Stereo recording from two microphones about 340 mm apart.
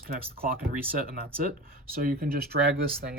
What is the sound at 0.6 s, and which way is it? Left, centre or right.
Speech, right.